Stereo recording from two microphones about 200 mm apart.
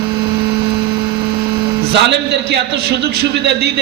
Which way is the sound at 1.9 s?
55° right (ahead or behind).